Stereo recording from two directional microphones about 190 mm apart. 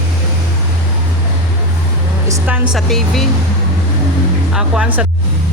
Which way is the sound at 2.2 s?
10° right (ahead or behind).